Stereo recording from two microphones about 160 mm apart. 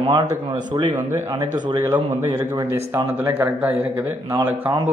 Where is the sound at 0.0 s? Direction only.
30° right (ahead or behind).